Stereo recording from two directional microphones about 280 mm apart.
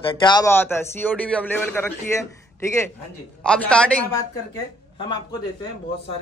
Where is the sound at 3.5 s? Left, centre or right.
Centre.